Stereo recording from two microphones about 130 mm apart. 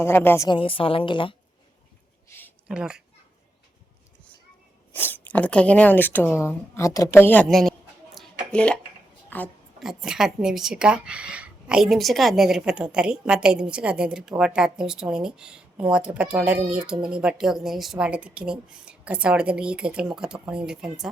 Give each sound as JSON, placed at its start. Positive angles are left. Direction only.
{"t": 0.0, "sound": "speech", "side_deg": 15}
{"t": 0.4, "sound": "a woman's voice", "side_deg": 40}
{"t": 2.3, "sound": "a sound", "side_deg": 20}
{"t": 2.6, "sound": "a woman's voice", "side_deg": -5}
{"t": 4.9, "sound": "speech", "side_deg": 15}
{"t": 7.4, "sound": "a sound", "side_deg": 0}
{"t": 8.4, "sound": "a woman's voice", "side_deg": 10}
{"t": 9.8, "sound": "a woman's voice", "side_deg": -5}